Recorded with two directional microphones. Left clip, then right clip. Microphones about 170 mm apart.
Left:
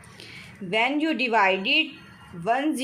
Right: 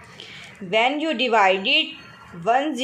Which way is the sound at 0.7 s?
20° left (ahead or behind).